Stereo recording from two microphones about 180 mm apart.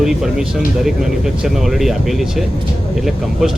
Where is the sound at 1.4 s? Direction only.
Centre (ahead or behind).